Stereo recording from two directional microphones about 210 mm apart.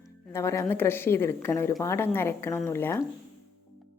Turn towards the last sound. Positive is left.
turn(degrees=10)  # may be behind; listen again after turning